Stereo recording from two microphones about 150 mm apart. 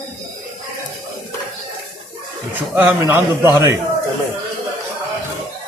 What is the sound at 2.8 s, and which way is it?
A man's voice, 15° right (ahead or behind).